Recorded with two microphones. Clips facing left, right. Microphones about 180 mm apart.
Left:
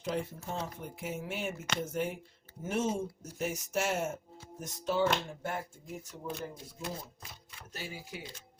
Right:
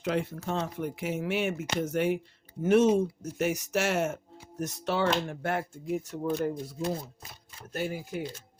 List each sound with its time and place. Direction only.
0.0 s speech: 75° right (ahead or behind)
7.7 s speech: 55° right (ahead or behind)